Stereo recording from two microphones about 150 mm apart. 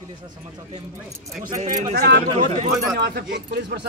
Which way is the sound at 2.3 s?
50° right (ahead or behind).